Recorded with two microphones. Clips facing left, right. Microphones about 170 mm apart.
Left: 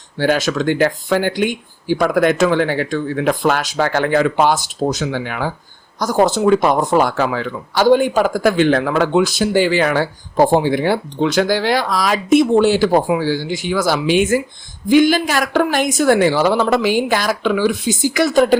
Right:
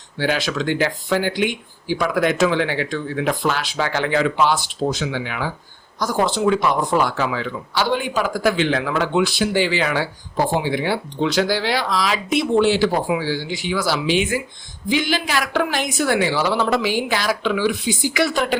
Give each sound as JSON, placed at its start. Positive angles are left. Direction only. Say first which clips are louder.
{"t": 0.2, "sound": "speech", "louder": "left 5 dB", "side_deg": 45}